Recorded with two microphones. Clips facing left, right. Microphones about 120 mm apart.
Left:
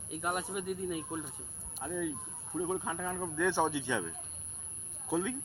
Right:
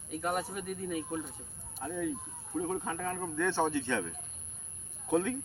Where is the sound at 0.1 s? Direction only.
5° left (ahead or behind).